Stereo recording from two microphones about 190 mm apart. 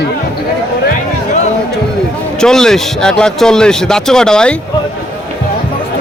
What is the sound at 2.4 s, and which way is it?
Speech, 5° left (ahead or behind).